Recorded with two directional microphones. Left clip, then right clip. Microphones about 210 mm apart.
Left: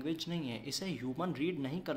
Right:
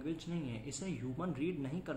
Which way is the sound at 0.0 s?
40° left (ahead or behind).